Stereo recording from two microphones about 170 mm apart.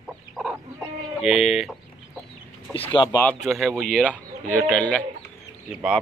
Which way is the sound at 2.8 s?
25° left (ahead or behind).